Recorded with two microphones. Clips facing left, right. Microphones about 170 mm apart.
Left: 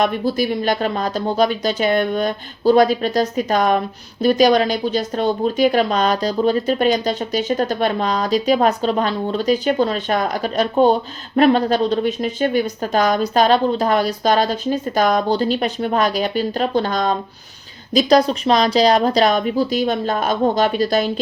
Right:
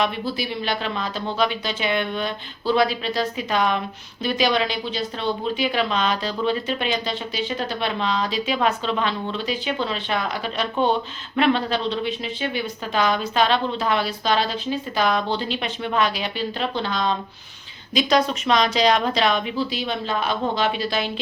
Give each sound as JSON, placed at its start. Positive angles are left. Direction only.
{"t": 0.0, "sound": "speech", "side_deg": 45}